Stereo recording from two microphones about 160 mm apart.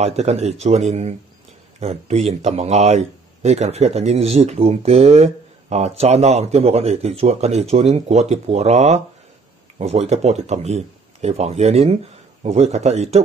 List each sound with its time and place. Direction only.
0.0 s speech: 45° right (ahead or behind)